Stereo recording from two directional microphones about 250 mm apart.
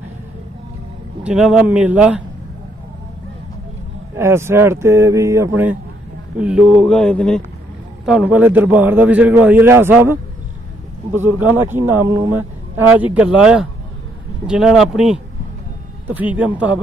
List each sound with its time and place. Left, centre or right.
1.2 s speech: centre
4.1 s a man's voice: centre
11.1 s a man's voice: centre